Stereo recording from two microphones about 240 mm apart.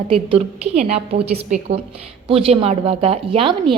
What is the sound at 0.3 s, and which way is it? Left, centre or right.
A woman's voice, right.